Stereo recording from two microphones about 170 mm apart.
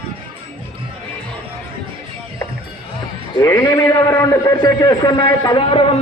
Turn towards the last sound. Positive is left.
turn(degrees=30)  # may be behind; listen again after turning